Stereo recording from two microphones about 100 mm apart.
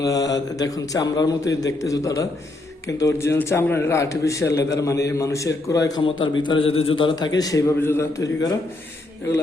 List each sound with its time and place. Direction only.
0.0 s a man's voice: 35° left (ahead or behind)
6.0 s a man's voice: 55° left (ahead or behind)
6.7 s a man's voice: 75° left (ahead or behind); by 7.2 s 55° left (ahead or behind)
7.2 s a man's voice: 40° left (ahead or behind)
7.8 s a man's voice: 25° left (ahead or behind)
8.2 s a man's voice: 40° left (ahead or behind)